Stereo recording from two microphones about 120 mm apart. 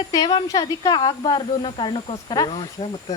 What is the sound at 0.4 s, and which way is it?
Speech, 30° left (ahead or behind).